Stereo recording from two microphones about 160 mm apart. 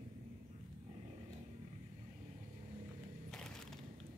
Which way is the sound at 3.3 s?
5° left (ahead or behind).